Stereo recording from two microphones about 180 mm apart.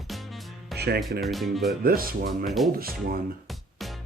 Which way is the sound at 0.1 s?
Centre (ahead or behind).